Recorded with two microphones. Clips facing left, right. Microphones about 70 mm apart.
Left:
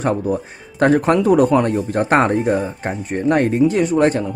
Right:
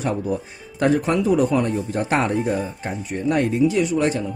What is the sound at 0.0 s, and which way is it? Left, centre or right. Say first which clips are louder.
Speech: left 4 dB; left.